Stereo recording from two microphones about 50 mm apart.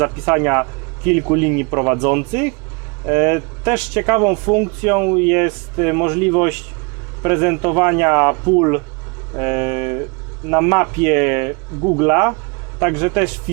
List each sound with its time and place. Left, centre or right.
0.3 s speech: right
3.8 s speech: centre
4.0 s speech: right